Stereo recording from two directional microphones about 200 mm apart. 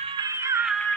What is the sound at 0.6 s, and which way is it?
Music, centre (ahead or behind).